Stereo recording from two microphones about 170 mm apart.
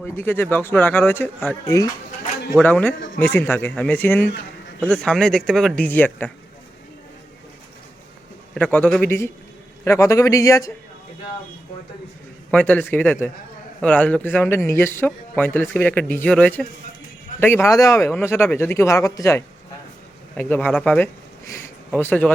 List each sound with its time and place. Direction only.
0.0 s a man's voice: 15° left (ahead or behind)
8.5 s a man's voice: 10° left (ahead or behind)
12.5 s a man's voice: 10° left (ahead or behind)